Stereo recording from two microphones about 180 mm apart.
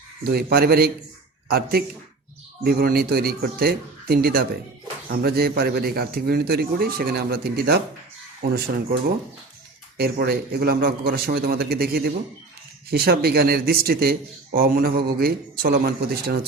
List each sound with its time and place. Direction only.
0.3 s a man's voice: 55° right (ahead or behind)
10.0 s a man's voice: 60° right (ahead or behind)